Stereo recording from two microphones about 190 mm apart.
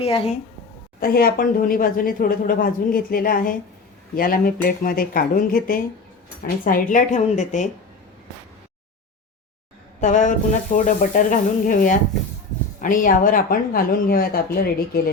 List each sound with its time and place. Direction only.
0.0 s speech: 30° left (ahead or behind)
0.9 s speech: 50° left (ahead or behind)
10.0 s speech: 40° left (ahead or behind)